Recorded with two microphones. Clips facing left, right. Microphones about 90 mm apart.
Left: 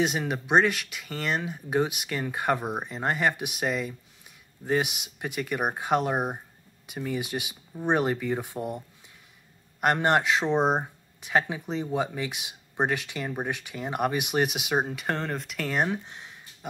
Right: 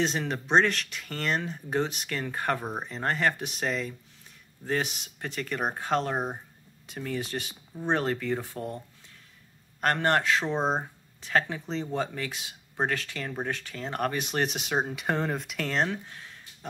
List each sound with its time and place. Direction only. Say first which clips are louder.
0.0 s speech: left 2 dB; 10° left (ahead or behind)
15.8 s speech: left 1 dB; 20° left (ahead or behind)